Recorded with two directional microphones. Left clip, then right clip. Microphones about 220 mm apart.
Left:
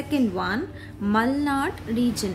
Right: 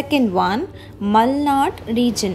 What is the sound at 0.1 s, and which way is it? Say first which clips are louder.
A woman's voice: right 7 dB; 20° right (ahead or behind).